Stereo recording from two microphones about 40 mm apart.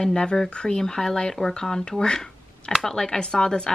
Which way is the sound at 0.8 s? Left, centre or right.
Centre.